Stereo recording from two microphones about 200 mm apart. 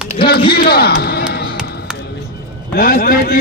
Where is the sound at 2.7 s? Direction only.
45° left (ahead or behind).